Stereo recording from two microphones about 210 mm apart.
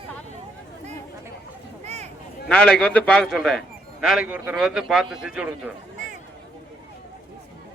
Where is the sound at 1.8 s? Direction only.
30° right (ahead or behind).